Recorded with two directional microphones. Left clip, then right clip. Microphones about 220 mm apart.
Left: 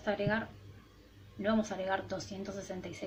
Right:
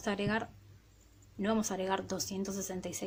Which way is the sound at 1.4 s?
50° right (ahead or behind).